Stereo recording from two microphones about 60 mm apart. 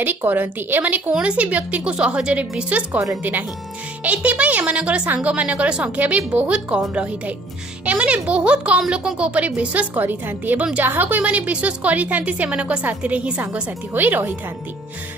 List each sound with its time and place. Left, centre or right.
0.0 s speech: right
1.1 s speech: right
4.0 s speech: right